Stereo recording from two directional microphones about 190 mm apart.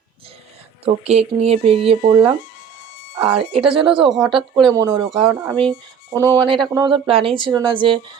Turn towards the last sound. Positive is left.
turn(degrees=-25)  # may be behind; listen again after turning